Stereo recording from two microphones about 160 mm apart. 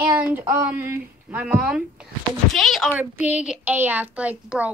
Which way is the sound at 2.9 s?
10° right (ahead or behind).